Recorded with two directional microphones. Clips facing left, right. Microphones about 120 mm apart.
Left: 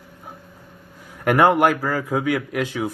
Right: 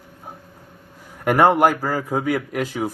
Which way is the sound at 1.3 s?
Centre (ahead or behind).